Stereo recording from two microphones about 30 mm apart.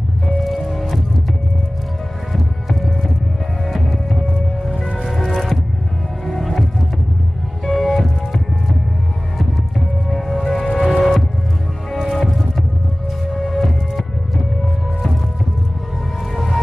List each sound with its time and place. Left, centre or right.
0.4 s music: centre
3.6 s music: centre
5.1 s music: centre
7.6 s music: centre
10.0 s music: centre
10.9 s music: centre
11.9 s music: centre
13.3 s music: centre
16.3 s music: centre